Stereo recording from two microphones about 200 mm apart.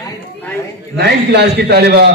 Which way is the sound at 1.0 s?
55° right (ahead or behind).